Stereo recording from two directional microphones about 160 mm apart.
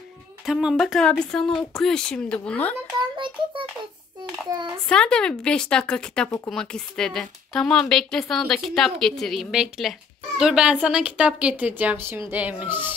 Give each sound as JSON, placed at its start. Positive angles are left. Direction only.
{"t": 0.5, "sound": "a woman's voice", "side_deg": -5}
{"t": 2.9, "sound": "child singing", "side_deg": -25}
{"t": 4.8, "sound": "a woman's voice", "side_deg": 5}